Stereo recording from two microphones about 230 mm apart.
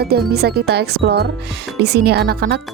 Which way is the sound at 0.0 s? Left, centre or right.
Right.